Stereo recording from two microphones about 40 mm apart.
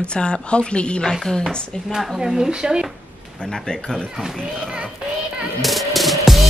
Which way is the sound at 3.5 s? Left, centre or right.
Centre.